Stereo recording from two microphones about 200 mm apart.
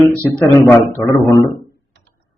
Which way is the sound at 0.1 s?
10° left (ahead or behind).